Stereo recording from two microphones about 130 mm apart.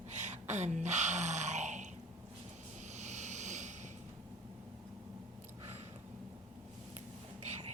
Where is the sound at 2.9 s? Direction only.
65° right (ahead or behind).